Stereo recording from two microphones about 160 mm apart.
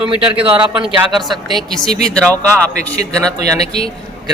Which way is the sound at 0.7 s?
5° right (ahead or behind).